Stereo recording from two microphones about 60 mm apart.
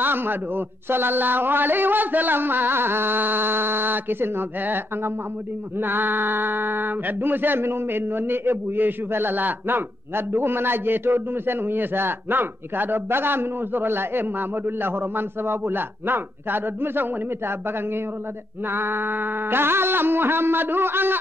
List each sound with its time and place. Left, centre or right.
0.0 s male singing: right